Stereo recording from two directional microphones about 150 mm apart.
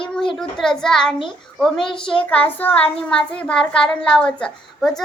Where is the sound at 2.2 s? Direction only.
10° left (ahead or behind).